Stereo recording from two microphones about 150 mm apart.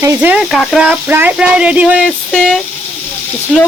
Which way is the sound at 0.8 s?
10° right (ahead or behind).